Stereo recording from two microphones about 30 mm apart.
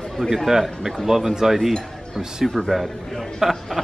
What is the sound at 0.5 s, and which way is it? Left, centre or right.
Speech, centre.